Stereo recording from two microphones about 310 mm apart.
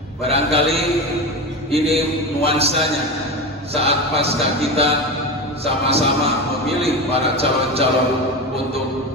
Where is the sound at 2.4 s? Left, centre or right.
Centre.